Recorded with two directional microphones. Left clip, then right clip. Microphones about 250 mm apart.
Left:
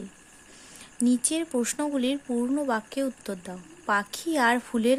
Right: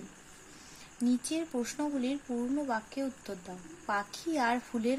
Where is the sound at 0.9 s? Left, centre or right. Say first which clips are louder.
Left 6 dB; left.